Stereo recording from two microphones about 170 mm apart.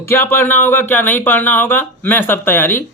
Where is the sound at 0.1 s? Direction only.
15° left (ahead or behind).